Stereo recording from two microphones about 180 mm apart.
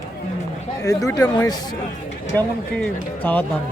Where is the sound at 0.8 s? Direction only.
15° left (ahead or behind).